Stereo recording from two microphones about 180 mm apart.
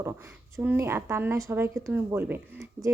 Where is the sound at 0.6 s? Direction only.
10° right (ahead or behind).